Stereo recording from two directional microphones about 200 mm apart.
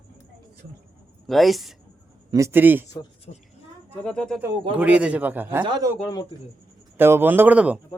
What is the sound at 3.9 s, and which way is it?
A man's voice, 5° left (ahead or behind).